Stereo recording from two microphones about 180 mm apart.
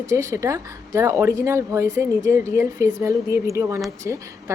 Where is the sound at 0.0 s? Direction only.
15° right (ahead or behind).